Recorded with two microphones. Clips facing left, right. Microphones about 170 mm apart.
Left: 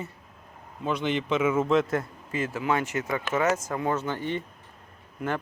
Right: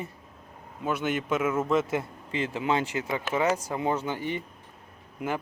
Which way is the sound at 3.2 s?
15° right (ahead or behind).